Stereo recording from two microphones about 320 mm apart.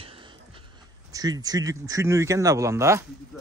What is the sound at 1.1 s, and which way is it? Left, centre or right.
Speech, centre.